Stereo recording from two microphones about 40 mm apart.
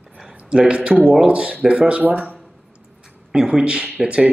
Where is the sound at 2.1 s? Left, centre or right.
Right.